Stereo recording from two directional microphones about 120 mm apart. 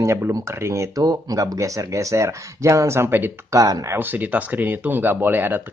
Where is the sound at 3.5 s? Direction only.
30° right (ahead or behind).